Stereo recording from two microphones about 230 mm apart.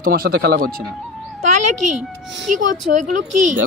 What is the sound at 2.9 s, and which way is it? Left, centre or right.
Speech, right.